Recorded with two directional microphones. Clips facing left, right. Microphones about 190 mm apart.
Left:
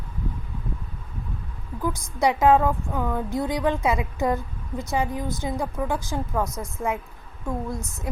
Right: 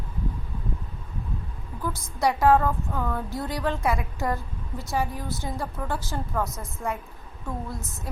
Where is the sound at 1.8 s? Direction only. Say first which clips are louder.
Left 3 dB; 15° left (ahead or behind).